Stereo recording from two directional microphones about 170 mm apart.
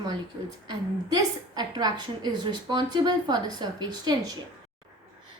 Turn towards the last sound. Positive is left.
turn(degrees=-25)  # may be behind; listen again after turning